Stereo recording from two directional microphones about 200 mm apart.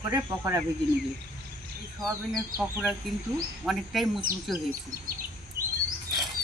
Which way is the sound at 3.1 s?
Centre (ahead or behind).